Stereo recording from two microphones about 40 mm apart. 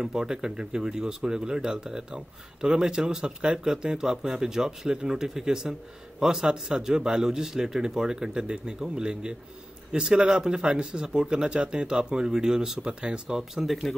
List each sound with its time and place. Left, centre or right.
0.0 s speech: centre
13.9 s speech: centre